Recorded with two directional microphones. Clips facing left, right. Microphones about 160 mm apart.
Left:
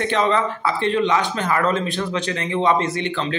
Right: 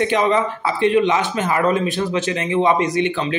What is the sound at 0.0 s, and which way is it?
A man's voice, 15° right (ahead or behind).